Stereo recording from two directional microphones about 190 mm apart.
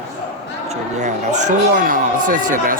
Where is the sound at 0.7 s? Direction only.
40° right (ahead or behind).